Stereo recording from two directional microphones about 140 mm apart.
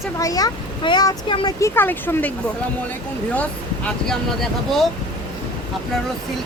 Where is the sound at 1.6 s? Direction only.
15° left (ahead or behind).